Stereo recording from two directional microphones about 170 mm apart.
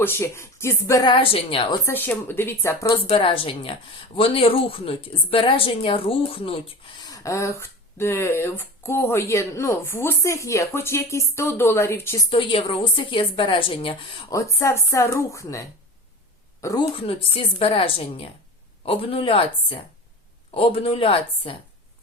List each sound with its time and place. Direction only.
0.0 s speech: 15° left (ahead or behind)
1.1 s a woman's voice: 35° left (ahead or behind)
1.9 s speech: 10° left (ahead or behind)
3.1 s a woman's voice: 35° left (ahead or behind)
7.0 s speech: 20° left (ahead or behind)
12.4 s speech: 30° left (ahead or behind)
16.9 s a woman's voice: 30° left (ahead or behind)